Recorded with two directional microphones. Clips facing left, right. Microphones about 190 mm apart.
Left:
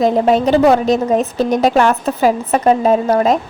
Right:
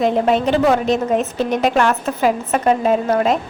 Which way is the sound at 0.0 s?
40° left (ahead or behind).